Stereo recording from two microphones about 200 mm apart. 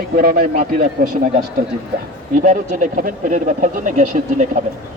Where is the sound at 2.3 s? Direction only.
40° right (ahead or behind).